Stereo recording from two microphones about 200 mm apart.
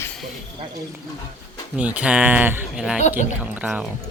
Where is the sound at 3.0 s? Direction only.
40° left (ahead or behind).